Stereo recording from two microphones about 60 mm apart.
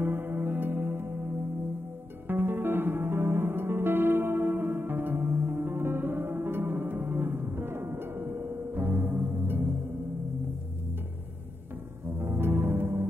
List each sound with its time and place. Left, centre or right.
0.0 s music: right
12.2 s music: right